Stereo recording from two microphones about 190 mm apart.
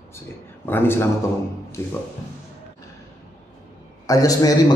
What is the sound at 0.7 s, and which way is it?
Speech, 10° left (ahead or behind).